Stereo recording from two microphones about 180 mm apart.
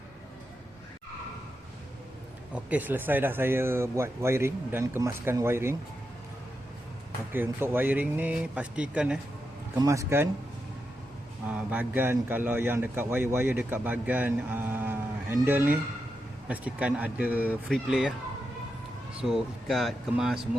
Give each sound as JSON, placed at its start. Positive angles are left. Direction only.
{"t": 2.6, "sound": "a man's voice", "side_deg": -10}
{"t": 7.3, "sound": "a man's voice", "side_deg": -10}
{"t": 9.7, "sound": "a man's voice", "side_deg": -20}
{"t": 11.4, "sound": "a man's voice", "side_deg": -10}
{"t": 19.2, "sound": "speech", "side_deg": 0}